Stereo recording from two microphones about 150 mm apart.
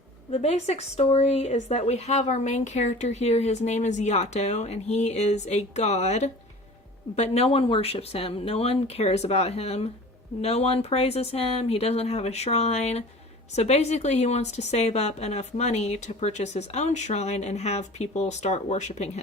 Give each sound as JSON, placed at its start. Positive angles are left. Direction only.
{"t": 0.3, "sound": "speech", "side_deg": 45}